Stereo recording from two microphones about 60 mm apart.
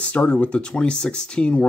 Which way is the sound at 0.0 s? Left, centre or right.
Left.